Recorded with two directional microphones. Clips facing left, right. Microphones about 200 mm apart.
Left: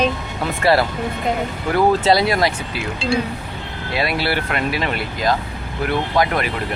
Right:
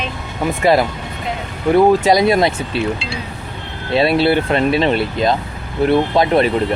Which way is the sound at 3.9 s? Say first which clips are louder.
Right 8 dB; 25° right (ahead or behind).